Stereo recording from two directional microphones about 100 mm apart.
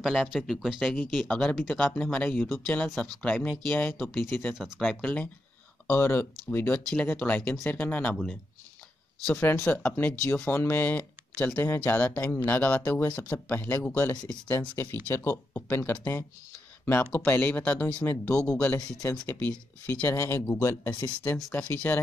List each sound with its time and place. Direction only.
0.0 s speech: centre (ahead or behind)
0.9 s speech: 10° left (ahead or behind)
9.2 s speech: 15° left (ahead or behind)